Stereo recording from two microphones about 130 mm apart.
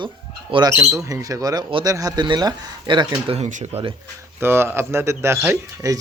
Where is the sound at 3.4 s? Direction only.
65° right (ahead or behind).